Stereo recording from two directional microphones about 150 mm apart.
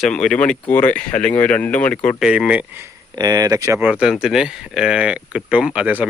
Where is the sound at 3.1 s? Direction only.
25° right (ahead or behind).